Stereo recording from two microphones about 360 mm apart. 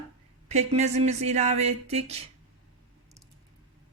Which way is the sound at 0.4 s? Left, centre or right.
Centre.